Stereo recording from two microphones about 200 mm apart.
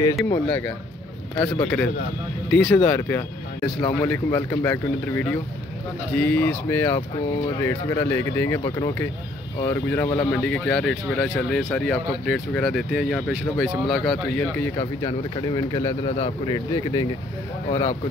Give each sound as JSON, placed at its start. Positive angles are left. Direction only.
{"t": 0.3, "sound": "a man's voice", "side_deg": 10}
{"t": 14.6, "sound": "a man's voice", "side_deg": 15}